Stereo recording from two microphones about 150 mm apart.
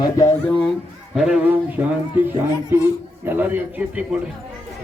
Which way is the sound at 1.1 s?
5° right (ahead or behind).